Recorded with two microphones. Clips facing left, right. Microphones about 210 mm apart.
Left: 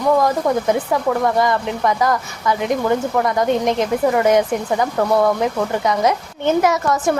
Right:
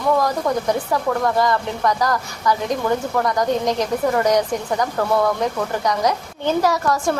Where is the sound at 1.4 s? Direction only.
20° left (ahead or behind).